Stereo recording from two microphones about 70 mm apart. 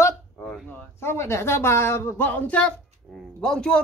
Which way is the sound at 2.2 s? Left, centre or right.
Left.